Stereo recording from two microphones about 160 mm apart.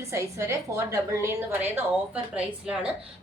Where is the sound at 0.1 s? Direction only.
20° right (ahead or behind).